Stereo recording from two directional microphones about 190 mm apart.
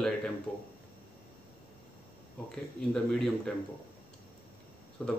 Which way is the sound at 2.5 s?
Centre (ahead or behind).